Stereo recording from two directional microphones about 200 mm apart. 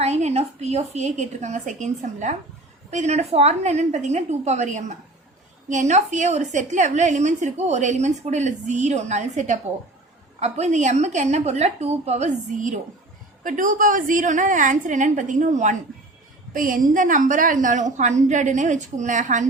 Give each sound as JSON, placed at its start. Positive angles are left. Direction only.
{"t": 0.0, "sound": "a woman's voice", "side_deg": -35}